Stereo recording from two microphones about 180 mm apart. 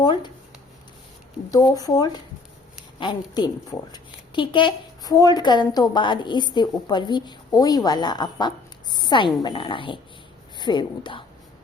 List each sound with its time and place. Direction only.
0.0 s a woman's voice: 25° left (ahead or behind)
1.5 s a woman's voice: 20° left (ahead or behind)